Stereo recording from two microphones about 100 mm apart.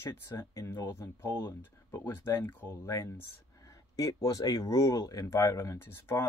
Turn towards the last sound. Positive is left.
turn(degrees=25)  # may be behind; listen again after turning